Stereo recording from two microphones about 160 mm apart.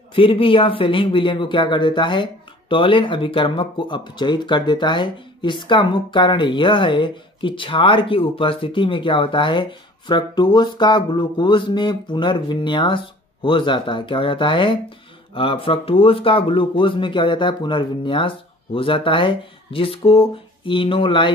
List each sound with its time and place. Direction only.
0.1 s speech: 35° left (ahead or behind)